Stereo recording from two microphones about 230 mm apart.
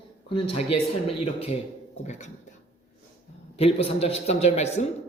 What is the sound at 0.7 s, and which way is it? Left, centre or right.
Speech, left.